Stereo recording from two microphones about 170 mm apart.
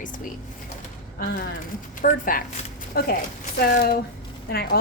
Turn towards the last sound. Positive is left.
turn(degrees=60)  # may be behind; listen again after turning